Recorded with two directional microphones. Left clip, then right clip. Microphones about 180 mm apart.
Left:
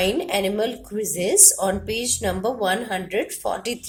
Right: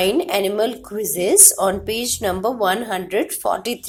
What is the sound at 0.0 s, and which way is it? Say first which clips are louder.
Speech: right 3 dB; 25° right (ahead or behind).